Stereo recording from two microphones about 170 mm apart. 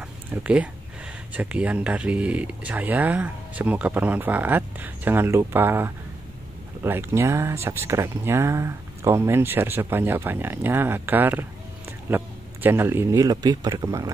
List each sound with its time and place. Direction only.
0.0 s a sound: 10° right (ahead or behind)
1.3 s speech: 10° right (ahead or behind)
12.6 s speech: 15° right (ahead or behind)